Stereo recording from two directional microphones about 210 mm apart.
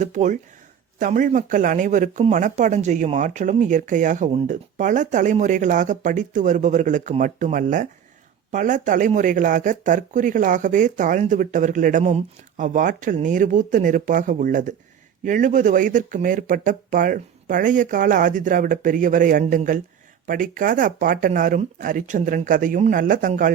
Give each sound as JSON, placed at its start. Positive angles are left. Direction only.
{"t": 0.0, "sound": "speech", "side_deg": -35}